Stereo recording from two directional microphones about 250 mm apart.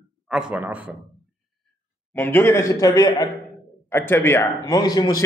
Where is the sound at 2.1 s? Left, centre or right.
Centre.